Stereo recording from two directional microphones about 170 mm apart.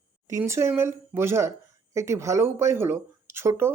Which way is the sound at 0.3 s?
15° right (ahead or behind).